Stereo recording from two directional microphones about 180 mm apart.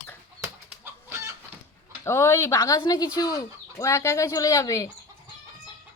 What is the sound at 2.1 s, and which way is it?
Speech, 15° left (ahead or behind).